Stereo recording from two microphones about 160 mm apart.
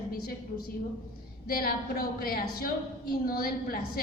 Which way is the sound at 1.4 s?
65° left (ahead or behind).